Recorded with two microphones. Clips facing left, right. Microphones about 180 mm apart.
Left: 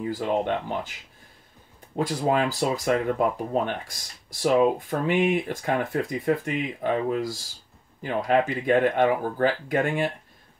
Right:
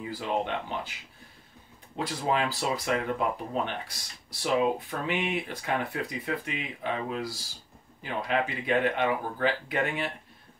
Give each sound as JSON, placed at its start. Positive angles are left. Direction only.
{"t": 0.0, "sound": "speech", "side_deg": 45}
{"t": 2.0, "sound": "speech", "side_deg": 45}